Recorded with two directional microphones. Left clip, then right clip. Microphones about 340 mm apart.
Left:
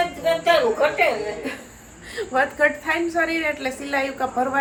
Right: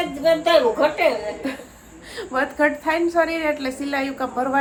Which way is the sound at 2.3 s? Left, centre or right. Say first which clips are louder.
Left 1 dB; centre.